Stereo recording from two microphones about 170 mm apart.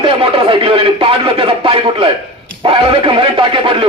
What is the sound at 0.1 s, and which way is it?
Speech, 30° right (ahead or behind).